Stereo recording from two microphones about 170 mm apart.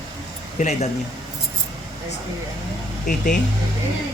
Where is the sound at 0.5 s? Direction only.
45° left (ahead or behind).